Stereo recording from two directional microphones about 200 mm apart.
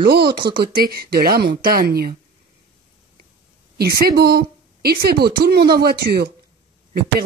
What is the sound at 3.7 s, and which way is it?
A woman's voice, 50° right (ahead or behind).